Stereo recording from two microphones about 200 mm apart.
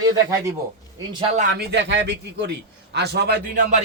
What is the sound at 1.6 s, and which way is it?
Speech, 60° right (ahead or behind).